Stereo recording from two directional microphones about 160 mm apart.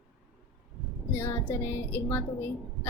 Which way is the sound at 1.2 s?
15° left (ahead or behind).